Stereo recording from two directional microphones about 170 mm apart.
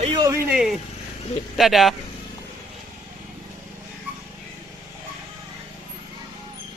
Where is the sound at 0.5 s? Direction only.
5° right (ahead or behind).